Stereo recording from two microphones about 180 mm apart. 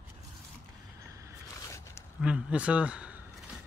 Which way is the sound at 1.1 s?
15° right (ahead or behind).